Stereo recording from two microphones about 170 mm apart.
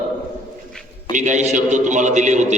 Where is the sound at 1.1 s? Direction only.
45° right (ahead or behind).